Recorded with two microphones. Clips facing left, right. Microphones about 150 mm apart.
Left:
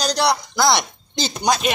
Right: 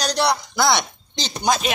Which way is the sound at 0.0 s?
Centre (ahead or behind).